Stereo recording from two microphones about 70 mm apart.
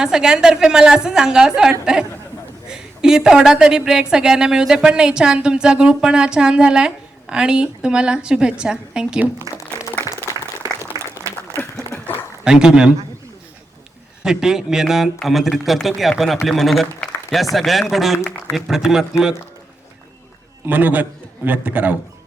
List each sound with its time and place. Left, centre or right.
0.0 s a woman's voice: centre
10.2 s applause: right
11.5 s a sound: left
12.5 s a woman's voice: centre
14.3 s a woman's voice: centre
20.7 s a man's voice: right